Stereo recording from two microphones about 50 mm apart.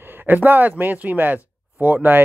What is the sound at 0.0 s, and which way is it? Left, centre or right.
Speech, right.